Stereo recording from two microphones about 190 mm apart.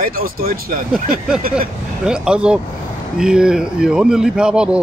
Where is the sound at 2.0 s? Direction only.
5° right (ahead or behind).